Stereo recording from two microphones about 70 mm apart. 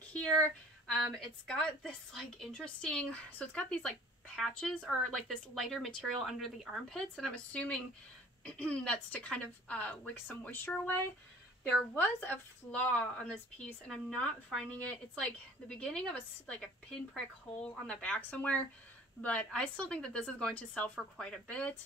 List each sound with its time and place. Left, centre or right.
0.1 s a woman's voice: centre